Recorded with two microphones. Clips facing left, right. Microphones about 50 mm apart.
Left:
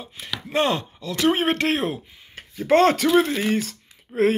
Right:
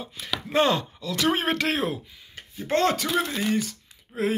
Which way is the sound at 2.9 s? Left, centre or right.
Left.